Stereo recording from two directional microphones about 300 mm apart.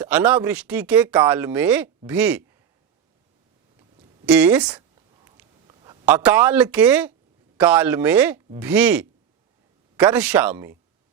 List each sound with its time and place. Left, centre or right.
0.0 s speech: centre
4.3 s speech: centre
5.4 s a sound: centre
7.5 s speech: centre